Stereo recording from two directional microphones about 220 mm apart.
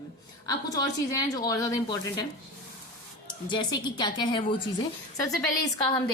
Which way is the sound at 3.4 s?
20° left (ahead or behind).